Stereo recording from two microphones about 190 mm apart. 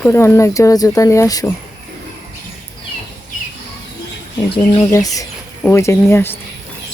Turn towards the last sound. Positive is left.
turn(degrees=10)  # may be behind; listen again after turning